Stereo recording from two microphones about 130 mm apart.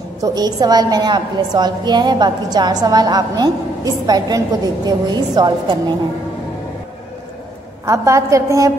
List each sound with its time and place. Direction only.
0.2 s a woman's voice: 30° right (ahead or behind)
7.8 s a woman's voice: 25° right (ahead or behind)